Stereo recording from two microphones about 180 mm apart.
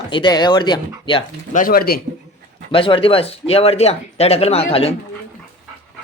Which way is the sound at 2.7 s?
30° left (ahead or behind).